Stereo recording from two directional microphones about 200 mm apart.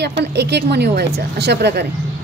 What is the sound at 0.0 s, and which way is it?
A woman's voice, 55° right (ahead or behind).